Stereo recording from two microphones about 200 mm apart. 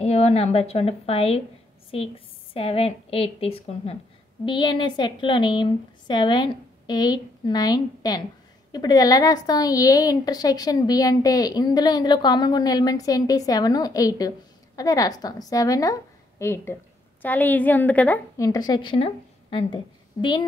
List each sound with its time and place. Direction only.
0.0 s a woman's voice: 30° left (ahead or behind)